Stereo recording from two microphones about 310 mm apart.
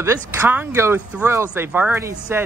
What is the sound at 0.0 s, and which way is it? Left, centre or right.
Speech, centre.